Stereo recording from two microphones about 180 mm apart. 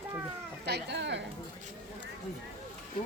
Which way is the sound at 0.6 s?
70° right (ahead or behind).